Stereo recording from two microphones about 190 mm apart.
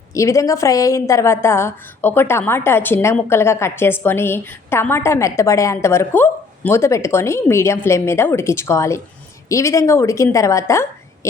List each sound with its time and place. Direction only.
0.1 s a woman's voice: 15° left (ahead or behind)